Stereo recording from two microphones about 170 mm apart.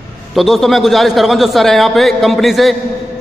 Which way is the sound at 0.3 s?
Centre (ahead or behind).